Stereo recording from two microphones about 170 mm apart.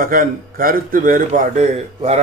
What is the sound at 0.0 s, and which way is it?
A man's voice, 55° right (ahead or behind).